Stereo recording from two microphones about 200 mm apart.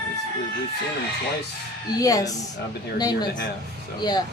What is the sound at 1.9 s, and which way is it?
A woman's voice, 15° left (ahead or behind).